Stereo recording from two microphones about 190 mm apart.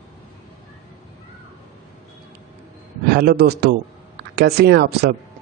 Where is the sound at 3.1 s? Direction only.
55° right (ahead or behind).